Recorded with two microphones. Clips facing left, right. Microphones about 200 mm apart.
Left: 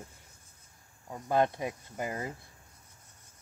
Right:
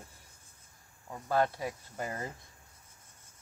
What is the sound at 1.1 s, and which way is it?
Speech, 20° left (ahead or behind).